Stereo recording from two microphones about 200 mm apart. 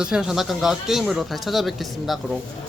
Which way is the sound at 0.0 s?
5° right (ahead or behind).